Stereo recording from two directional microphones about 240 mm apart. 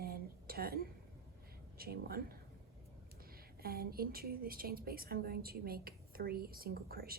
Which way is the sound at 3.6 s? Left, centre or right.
Right.